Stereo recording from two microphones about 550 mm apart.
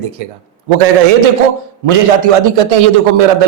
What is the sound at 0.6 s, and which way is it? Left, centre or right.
Speech, right.